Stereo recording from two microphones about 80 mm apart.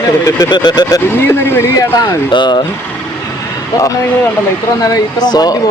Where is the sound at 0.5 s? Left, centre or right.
Left.